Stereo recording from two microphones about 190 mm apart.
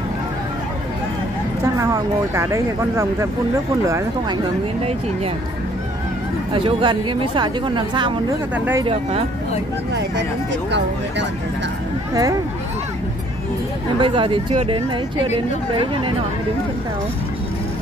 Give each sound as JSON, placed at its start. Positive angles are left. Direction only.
{"t": 1.6, "sound": "speech", "side_deg": -15}
{"t": 6.5, "sound": "speech", "side_deg": -25}
{"t": 8.5, "sound": "speech", "side_deg": -10}
{"t": 12.1, "sound": "speech", "side_deg": -20}
{"t": 13.9, "sound": "speech", "side_deg": -25}